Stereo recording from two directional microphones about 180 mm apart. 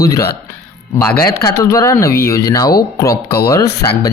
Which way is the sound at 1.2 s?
15° left (ahead or behind).